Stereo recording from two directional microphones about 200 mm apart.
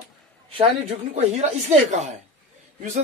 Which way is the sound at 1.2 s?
35° right (ahead or behind).